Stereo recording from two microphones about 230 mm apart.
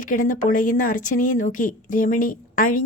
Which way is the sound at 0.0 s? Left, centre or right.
Left.